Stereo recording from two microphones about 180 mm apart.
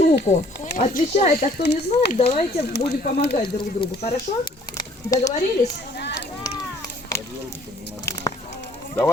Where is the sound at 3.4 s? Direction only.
30° left (ahead or behind).